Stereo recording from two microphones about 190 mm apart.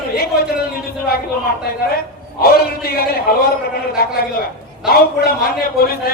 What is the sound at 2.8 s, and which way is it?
A man's voice, 55° left (ahead or behind).